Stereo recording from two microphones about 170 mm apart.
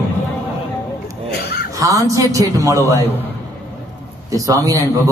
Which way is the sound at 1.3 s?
70° left (ahead or behind).